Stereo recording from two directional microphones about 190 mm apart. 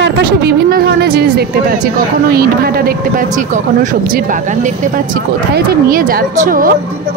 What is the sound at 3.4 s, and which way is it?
Speech, 40° right (ahead or behind).